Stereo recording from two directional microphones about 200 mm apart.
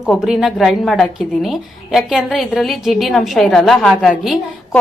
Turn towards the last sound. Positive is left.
turn(degrees=0)  # may be behind; listen again after turning